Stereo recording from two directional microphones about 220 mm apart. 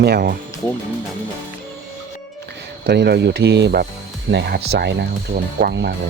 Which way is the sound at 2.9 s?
50° right (ahead or behind).